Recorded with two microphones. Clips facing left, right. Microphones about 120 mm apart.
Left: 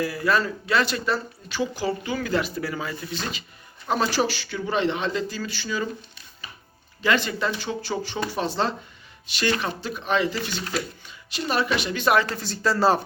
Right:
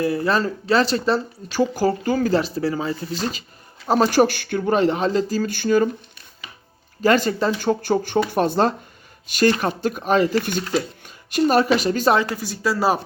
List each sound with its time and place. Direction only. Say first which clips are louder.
0.0 s speech: right 3 dB; 30° right (ahead or behind)
4.1 s speech: right 8 dB; 50° right (ahead or behind)
7.0 s a woman's voice: right 6 dB; 40° right (ahead or behind)
12.1 s speech: right 2 dB; 15° right (ahead or behind)